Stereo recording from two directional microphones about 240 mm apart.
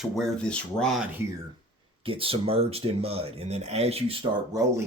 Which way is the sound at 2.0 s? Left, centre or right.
Right.